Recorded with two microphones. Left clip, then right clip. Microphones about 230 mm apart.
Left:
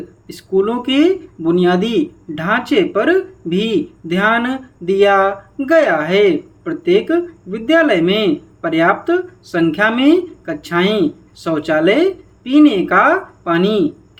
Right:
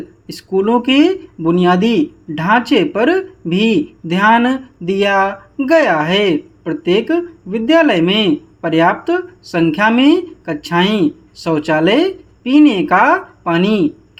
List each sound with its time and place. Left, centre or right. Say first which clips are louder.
0.3 s speech: right 1 dB; right